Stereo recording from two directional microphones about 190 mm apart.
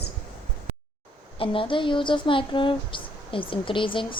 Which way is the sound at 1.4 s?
25° left (ahead or behind).